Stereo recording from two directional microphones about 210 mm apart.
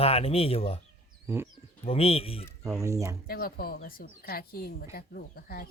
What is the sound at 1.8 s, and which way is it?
Speech, 30° left (ahead or behind).